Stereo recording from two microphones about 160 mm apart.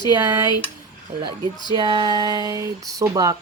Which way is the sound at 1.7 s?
30° right (ahead or behind).